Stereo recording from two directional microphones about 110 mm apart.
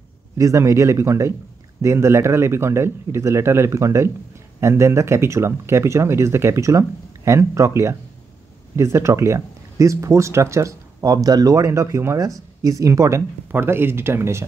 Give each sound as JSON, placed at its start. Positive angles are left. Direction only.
{"t": 0.4, "sound": "speech", "side_deg": -30}